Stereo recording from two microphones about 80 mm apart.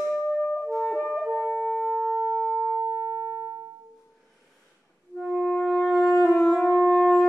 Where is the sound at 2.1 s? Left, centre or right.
Left.